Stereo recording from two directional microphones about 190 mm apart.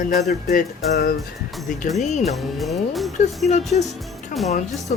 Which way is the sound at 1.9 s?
40° left (ahead or behind).